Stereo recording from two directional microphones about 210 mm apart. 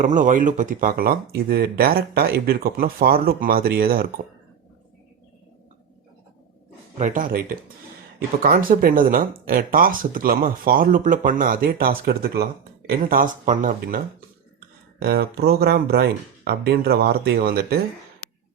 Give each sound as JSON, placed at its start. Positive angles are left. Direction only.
{"t": 0.0, "sound": "speech", "side_deg": -40}
{"t": 7.0, "sound": "speech", "side_deg": -40}